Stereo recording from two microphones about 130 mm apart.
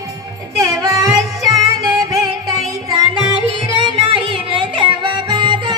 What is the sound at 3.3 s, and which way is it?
Music, 40° right (ahead or behind).